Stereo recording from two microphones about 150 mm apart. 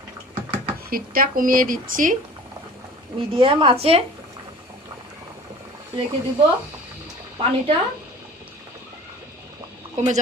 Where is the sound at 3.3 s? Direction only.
35° right (ahead or behind).